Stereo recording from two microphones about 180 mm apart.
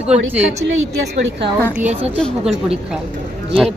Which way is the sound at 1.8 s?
40° right (ahead or behind).